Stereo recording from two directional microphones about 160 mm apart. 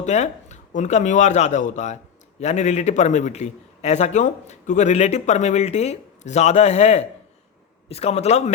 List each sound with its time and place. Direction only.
0.0 s a man's voice: 45° left (ahead or behind)